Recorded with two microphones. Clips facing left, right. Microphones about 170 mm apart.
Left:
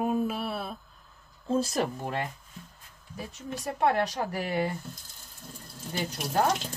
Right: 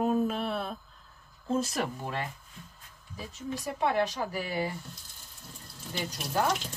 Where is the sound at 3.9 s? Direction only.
60° left (ahead or behind).